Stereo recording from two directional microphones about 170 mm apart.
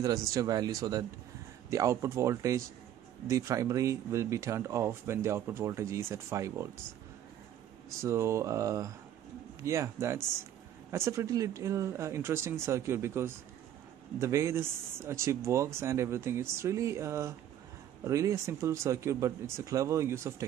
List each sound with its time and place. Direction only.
0.0 s speech: 20° right (ahead or behind)
8.0 s speech: 15° right (ahead or behind)